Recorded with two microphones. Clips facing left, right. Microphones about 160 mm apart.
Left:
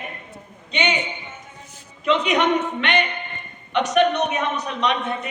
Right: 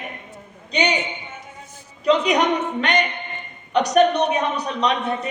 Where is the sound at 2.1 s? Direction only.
40° right (ahead or behind).